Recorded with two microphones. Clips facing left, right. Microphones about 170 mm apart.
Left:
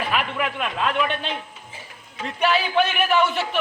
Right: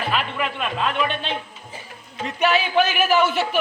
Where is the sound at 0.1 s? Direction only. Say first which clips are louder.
Even; 10° left (ahead or behind).